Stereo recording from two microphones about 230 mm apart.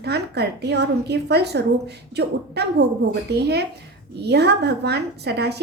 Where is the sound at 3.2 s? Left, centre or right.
Right.